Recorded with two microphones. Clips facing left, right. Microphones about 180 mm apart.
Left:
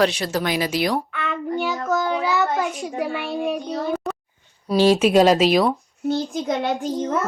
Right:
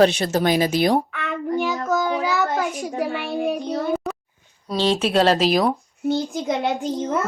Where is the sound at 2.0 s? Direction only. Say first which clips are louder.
Even; 45° right (ahead or behind).